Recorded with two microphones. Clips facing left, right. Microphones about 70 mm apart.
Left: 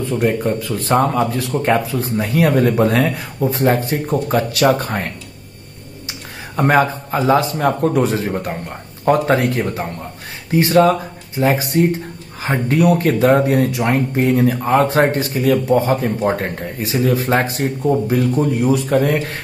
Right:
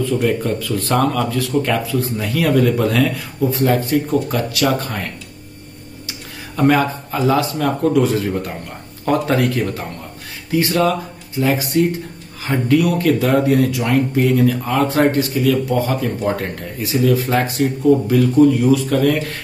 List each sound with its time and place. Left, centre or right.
0.0 s speech: left
6.5 s speech: left